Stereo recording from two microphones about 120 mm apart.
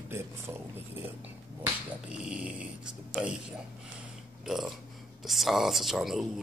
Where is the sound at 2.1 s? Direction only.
10° right (ahead or behind).